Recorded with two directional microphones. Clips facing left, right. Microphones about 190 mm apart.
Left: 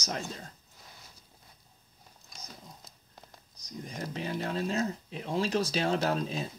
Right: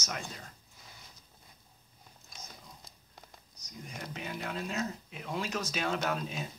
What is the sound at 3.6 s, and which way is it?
Speech, 35° left (ahead or behind).